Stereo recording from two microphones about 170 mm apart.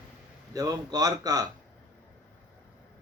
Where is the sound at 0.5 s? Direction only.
20° right (ahead or behind).